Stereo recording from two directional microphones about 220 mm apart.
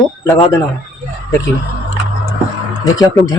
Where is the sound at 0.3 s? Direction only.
20° left (ahead or behind).